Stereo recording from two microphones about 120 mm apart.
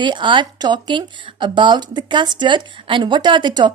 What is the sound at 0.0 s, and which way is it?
Speech, 40° right (ahead or behind).